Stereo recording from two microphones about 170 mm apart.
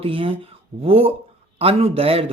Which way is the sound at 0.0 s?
30° right (ahead or behind).